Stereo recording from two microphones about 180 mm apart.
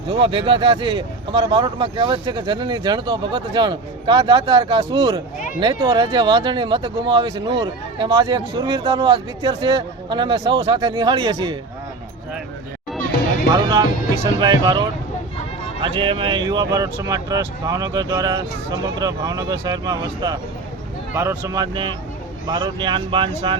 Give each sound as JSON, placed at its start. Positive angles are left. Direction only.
{"t": 0.2, "sound": "speech", "side_deg": -30}
{"t": 13.5, "sound": "speech", "side_deg": -25}